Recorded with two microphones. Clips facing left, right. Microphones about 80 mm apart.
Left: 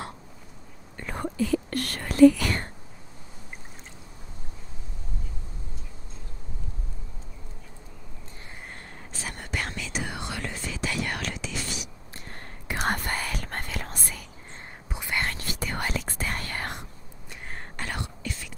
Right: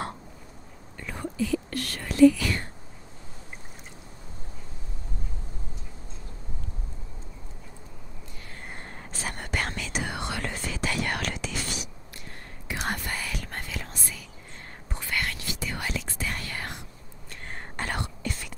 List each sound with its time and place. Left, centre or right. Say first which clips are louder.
0.9 s speech: left 2 dB; left
9.1 s whispering: right 2 dB; right
12.6 s whispering: left 3 dB; left
14.9 s whispering: left 1 dB; centre
15.2 s whispering: left 2 dB; left
17.7 s whispering: right 3 dB; right